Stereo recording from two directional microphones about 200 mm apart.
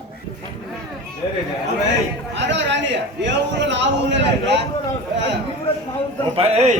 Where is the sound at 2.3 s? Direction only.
60° right (ahead or behind).